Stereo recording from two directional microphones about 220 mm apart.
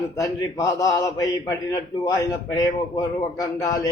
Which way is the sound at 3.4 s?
15° left (ahead or behind).